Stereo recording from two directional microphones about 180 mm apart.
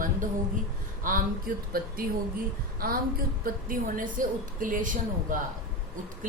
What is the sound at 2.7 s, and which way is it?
A woman's voice, 55° right (ahead or behind).